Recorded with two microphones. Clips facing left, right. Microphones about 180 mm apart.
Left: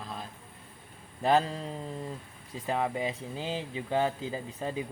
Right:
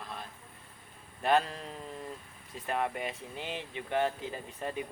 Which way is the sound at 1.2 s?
30° left (ahead or behind).